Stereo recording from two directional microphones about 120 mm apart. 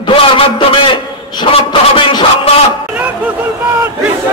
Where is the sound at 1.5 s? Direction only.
45° left (ahead or behind).